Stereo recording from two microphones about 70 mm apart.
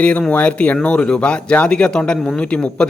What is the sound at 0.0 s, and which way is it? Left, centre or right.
Speech, centre.